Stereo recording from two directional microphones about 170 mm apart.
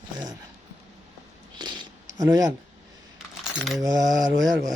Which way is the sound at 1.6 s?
25° right (ahead or behind).